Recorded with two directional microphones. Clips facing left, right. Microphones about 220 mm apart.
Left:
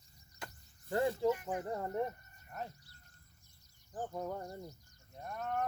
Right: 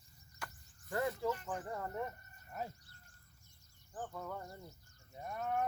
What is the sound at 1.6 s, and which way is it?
Speech, 30° left (ahead or behind).